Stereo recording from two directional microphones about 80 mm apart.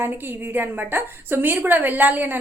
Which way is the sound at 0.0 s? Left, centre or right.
Right.